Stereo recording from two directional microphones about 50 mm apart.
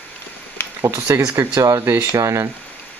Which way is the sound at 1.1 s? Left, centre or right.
Right.